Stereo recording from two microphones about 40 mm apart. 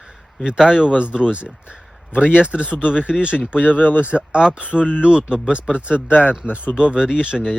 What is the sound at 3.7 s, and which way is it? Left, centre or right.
Speech, left.